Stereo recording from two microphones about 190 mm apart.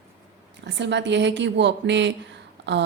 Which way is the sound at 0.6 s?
65° right (ahead or behind).